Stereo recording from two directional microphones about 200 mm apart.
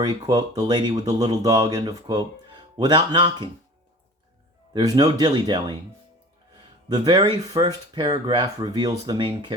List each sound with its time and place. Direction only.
0.0 s speech: 20° right (ahead or behind)
4.7 s speech: 20° right (ahead or behind)
6.8 s speech: 20° right (ahead or behind)